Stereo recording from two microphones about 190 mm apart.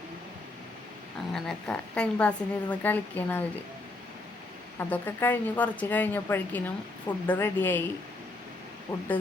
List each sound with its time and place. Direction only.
1.3 s a woman's voice: 5° left (ahead or behind)
4.8 s a woman's voice: 10° left (ahead or behind)
8.9 s speech: 20° left (ahead or behind)